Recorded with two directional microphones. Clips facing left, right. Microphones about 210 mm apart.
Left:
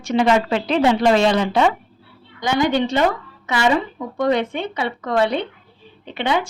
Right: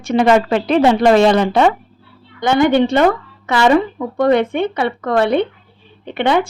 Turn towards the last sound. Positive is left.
turn(degrees=-55)  # may be behind; listen again after turning